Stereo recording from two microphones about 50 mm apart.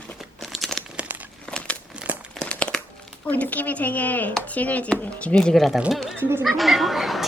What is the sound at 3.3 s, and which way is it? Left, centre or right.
Speech, left.